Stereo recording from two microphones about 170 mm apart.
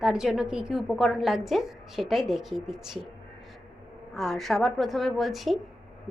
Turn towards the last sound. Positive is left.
turn(degrees=0)  # may be behind; listen again after turning